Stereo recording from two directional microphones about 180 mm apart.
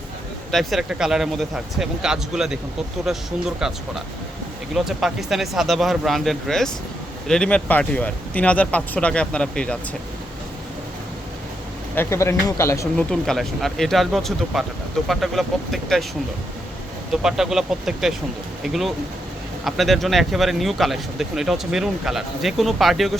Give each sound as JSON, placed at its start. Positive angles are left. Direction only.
{"t": 0.5, "sound": "speech", "side_deg": 0}
{"t": 11.9, "sound": "speech", "side_deg": 15}
{"t": 13.0, "sound": "speech", "side_deg": 5}
{"t": 17.1, "sound": "speech", "side_deg": 0}